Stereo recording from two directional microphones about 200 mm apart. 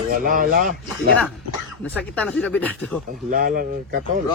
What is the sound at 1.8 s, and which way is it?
Speech, 5° left (ahead or behind).